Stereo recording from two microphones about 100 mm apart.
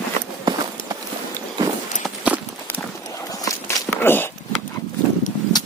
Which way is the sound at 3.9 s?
20° left (ahead or behind).